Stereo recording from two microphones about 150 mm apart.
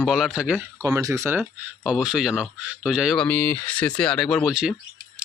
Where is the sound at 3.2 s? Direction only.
10° left (ahead or behind).